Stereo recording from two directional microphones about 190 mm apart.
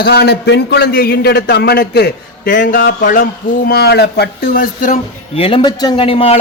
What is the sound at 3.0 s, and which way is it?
A man's voice, 45° left (ahead or behind).